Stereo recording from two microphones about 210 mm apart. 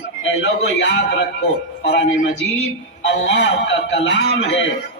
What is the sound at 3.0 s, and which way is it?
A man's voice, 55° left (ahead or behind).